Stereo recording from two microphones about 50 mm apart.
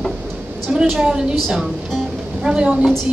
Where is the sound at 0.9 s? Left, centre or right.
Centre.